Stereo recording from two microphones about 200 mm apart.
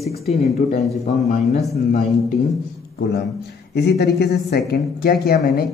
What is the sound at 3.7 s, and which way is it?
Speech, 55° left (ahead or behind).